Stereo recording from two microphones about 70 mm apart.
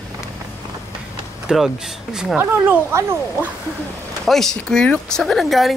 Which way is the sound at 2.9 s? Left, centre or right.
Right.